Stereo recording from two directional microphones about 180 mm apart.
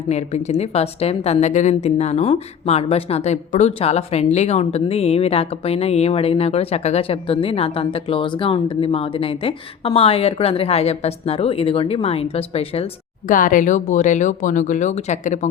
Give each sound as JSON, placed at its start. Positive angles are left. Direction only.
{"t": 0.1, "sound": "a woman's voice", "side_deg": 35}
{"t": 13.2, "sound": "speech", "side_deg": 50}